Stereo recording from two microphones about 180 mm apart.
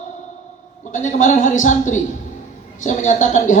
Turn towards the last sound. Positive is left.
turn(degrees=45)  # may be behind; listen again after turning